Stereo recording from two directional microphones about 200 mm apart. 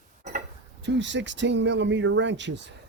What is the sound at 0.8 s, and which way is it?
Speech, 65° right (ahead or behind).